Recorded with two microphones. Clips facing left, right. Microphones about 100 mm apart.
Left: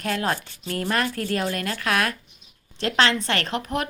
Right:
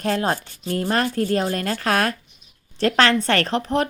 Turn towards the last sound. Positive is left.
turn(degrees=-30)  # may be behind; listen again after turning